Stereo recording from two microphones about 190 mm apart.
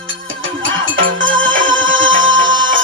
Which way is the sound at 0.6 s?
90° right.